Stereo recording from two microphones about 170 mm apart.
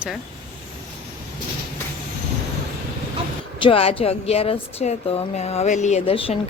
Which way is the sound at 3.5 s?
30° left (ahead or behind).